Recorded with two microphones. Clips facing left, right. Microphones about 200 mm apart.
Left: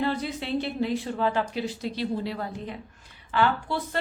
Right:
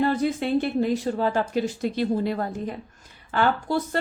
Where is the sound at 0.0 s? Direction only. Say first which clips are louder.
Right 6 dB; 45° right (ahead or behind).